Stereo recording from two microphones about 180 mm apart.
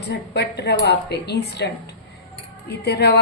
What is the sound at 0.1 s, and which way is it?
A woman's voice, 65° left (ahead or behind).